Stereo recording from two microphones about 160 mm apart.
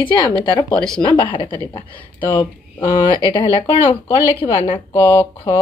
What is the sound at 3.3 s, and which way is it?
Speech, 30° left (ahead or behind).